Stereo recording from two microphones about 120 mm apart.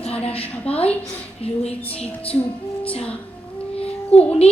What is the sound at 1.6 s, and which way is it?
Speech, 55° left (ahead or behind).